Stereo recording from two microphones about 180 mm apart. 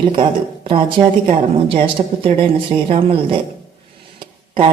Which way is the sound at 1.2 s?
30° right (ahead or behind).